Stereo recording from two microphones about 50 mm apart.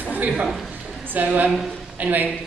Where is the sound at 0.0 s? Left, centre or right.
Right.